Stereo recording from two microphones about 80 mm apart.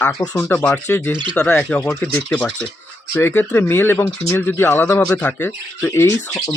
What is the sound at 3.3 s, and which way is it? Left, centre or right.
Speech, left.